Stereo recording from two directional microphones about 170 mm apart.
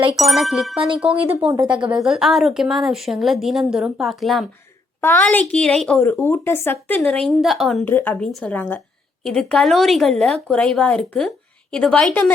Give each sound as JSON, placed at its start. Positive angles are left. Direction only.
{"t": 0.2, "sound": "a woman's voice", "side_deg": 0}
{"t": 1.5, "sound": "speech", "side_deg": -25}
{"t": 2.0, "sound": "a woman's voice", "side_deg": 0}
{"t": 4.9, "sound": "speech", "side_deg": 10}
{"t": 7.9, "sound": "a woman's voice", "side_deg": 10}